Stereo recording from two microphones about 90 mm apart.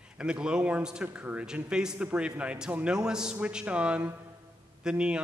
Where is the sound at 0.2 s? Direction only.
10° right (ahead or behind).